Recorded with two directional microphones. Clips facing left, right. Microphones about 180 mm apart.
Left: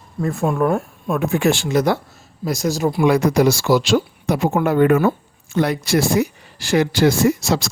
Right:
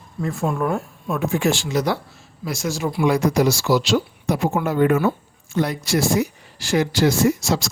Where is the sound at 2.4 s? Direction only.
40° left (ahead or behind).